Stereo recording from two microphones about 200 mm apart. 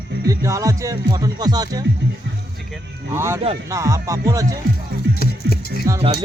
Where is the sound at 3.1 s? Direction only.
15° right (ahead or behind).